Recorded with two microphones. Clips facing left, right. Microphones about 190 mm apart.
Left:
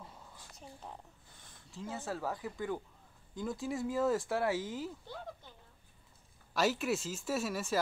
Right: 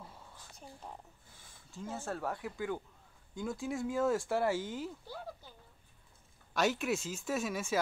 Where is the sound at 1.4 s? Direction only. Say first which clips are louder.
Even; 5° right (ahead or behind).